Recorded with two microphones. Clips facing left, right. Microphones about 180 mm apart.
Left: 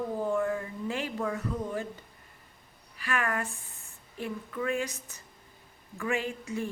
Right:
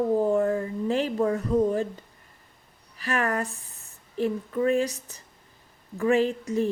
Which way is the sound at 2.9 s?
40° right (ahead or behind).